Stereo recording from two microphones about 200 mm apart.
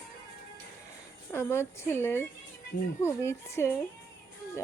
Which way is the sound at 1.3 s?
10° left (ahead or behind).